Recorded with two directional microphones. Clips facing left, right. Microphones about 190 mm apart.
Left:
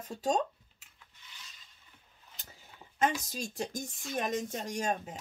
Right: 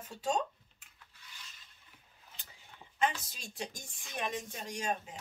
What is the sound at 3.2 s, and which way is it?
Speech, 40° left (ahead or behind).